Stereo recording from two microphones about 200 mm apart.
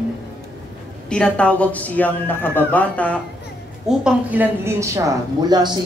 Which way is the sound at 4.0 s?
10° right (ahead or behind).